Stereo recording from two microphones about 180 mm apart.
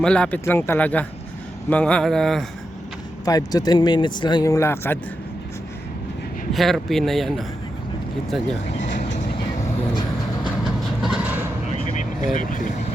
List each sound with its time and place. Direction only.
0.0 s speech: 5° left (ahead or behind)
3.2 s speech: 20° left (ahead or behind)
6.5 s speech: centre (ahead or behind)
10.6 s train: centre (ahead or behind)
11.7 s vehicle: 45° left (ahead or behind)